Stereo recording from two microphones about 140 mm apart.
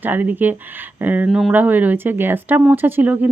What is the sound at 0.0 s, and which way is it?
Speech, 15° right (ahead or behind).